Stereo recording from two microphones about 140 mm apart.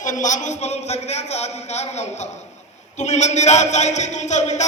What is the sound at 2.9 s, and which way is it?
A man's voice, 55° left (ahead or behind).